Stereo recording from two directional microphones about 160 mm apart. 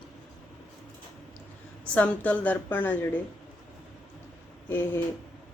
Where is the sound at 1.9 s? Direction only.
10° left (ahead or behind).